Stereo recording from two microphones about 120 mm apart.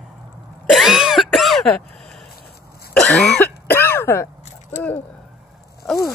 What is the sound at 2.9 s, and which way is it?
Cough, 5° left (ahead or behind).